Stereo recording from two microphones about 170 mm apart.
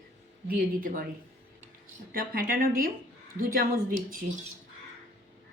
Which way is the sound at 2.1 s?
55° right (ahead or behind).